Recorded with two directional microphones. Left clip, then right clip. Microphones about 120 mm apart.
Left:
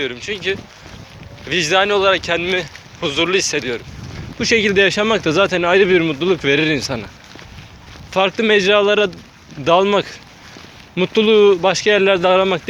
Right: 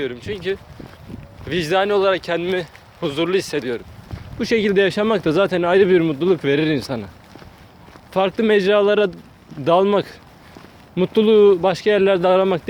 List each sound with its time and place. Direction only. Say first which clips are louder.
0.0 s speech: left 3 dB; 35° right (ahead or behind)
8.1 s speech: left 2 dB; 35° right (ahead or behind)